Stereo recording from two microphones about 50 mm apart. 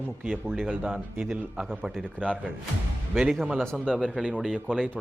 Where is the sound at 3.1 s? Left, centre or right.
Centre.